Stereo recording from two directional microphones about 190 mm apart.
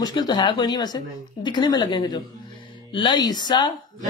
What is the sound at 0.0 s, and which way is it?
Speech, 20° left (ahead or behind).